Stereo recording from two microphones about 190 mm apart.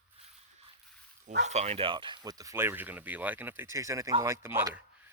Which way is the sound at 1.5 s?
35° right (ahead or behind).